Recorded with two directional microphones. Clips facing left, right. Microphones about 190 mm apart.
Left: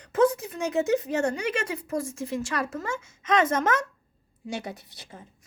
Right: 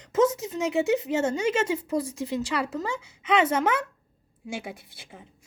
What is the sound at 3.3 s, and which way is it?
Speech, 10° right (ahead or behind).